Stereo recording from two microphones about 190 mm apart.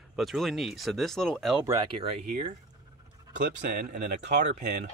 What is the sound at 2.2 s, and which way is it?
Speech, 40° right (ahead or behind).